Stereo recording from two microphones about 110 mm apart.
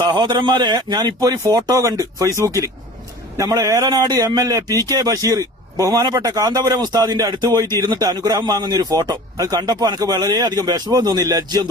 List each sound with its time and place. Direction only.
0.0 s a man's voice: 40° right (ahead or behind)